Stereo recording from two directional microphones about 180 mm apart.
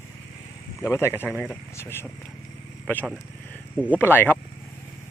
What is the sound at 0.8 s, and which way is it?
Speech, 15° left (ahead or behind).